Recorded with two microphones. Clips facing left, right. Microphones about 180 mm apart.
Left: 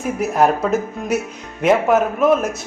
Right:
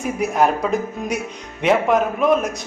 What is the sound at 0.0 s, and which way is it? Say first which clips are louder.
Speech: left 2 dB; centre (ahead or behind).